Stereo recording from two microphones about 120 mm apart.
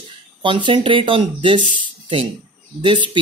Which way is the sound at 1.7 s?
45° right (ahead or behind).